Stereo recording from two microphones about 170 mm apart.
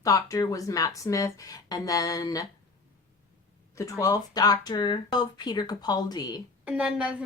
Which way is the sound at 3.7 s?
20° left (ahead or behind).